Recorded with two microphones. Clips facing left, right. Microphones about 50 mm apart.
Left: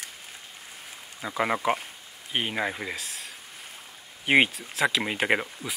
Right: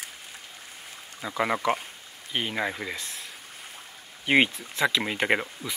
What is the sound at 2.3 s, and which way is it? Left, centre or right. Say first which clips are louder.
Speech: left 1 dB; centre.